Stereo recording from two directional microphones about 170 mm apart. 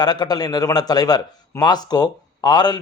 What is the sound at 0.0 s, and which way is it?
A man's voice, 25° left (ahead or behind).